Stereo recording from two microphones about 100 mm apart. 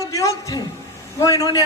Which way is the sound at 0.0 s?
35° left (ahead or behind).